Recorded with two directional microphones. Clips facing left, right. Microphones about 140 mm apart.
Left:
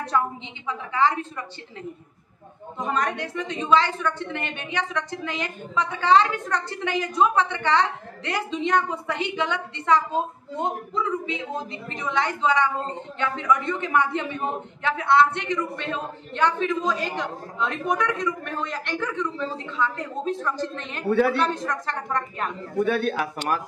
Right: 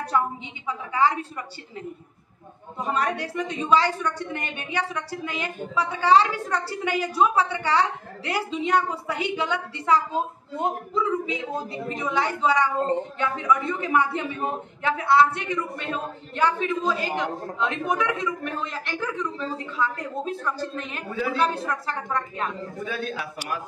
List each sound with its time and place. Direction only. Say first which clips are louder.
0.7 s a man's voice: even; 10° right (ahead or behind)
2.8 s a man's voice: even; 10° right (ahead or behind)
21.1 s a woman's voice: left 8 dB; 70° left (ahead or behind)
21.4 s a woman's voice: even; 5° right (ahead or behind)
22.8 s speech: left 10 dB; 60° left (ahead or behind)